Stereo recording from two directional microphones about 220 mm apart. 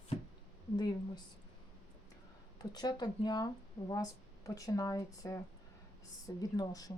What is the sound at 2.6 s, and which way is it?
Speech, 20° left (ahead or behind).